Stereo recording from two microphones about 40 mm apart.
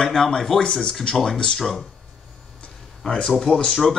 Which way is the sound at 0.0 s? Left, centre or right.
Centre.